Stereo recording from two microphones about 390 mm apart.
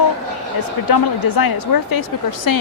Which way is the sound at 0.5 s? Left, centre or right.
Left.